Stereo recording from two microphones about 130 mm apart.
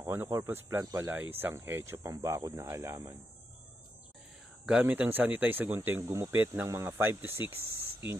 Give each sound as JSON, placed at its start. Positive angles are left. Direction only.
{"t": 0.0, "sound": "speech", "side_deg": -20}
{"t": 4.6, "sound": "speech", "side_deg": -10}